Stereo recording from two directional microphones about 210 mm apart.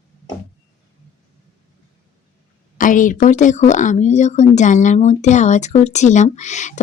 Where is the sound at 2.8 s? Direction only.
40° left (ahead or behind).